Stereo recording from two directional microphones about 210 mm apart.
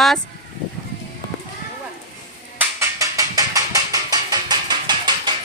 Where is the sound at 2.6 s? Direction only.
15° right (ahead or behind).